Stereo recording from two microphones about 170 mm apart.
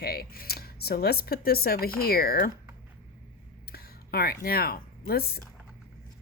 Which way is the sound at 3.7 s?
65° left (ahead or behind).